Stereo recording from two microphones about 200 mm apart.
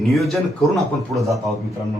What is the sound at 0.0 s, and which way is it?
Speech, centre (ahead or behind).